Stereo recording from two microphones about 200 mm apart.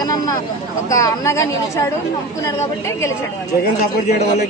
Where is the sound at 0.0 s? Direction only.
20° left (ahead or behind).